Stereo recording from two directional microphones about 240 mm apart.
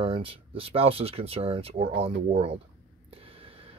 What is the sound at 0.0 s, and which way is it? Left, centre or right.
Speech, right.